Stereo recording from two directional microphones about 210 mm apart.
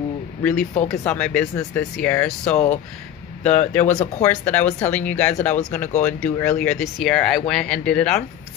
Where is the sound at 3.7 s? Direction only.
5° left (ahead or behind).